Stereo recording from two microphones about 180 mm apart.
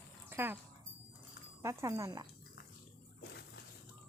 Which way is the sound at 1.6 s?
15° right (ahead or behind).